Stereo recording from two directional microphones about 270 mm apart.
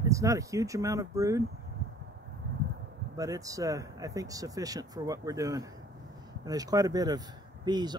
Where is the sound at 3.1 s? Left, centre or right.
Centre.